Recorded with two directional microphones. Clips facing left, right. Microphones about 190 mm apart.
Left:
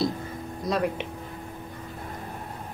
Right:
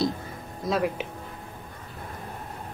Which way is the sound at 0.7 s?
Centre (ahead or behind).